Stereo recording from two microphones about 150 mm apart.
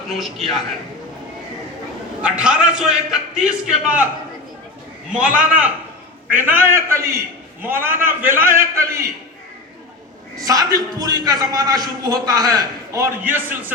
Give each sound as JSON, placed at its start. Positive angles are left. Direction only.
{"t": 2.2, "sound": "a man's voice", "side_deg": -5}
{"t": 5.0, "sound": "a man's voice", "side_deg": -5}
{"t": 10.4, "sound": "a man's voice", "side_deg": -25}